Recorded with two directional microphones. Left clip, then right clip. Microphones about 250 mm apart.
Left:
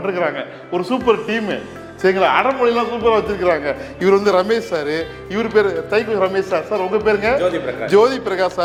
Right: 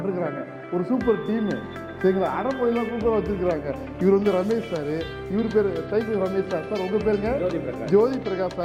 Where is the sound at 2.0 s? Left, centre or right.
Centre.